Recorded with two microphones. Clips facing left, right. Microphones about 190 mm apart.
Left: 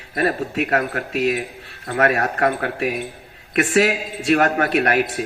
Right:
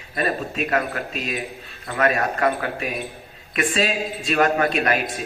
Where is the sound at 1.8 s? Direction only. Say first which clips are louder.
Left 2 dB; 60° left (ahead or behind).